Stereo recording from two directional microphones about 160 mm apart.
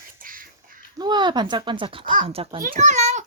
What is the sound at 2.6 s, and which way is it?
Speech, 50° right (ahead or behind).